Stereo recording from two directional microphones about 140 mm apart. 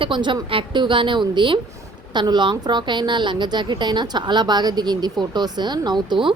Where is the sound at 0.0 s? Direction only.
35° right (ahead or behind).